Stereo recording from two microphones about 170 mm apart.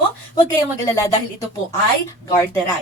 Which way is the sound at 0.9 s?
20° left (ahead or behind).